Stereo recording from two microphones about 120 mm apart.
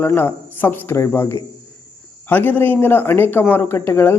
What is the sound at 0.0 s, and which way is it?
A man's voice, 20° left (ahead or behind).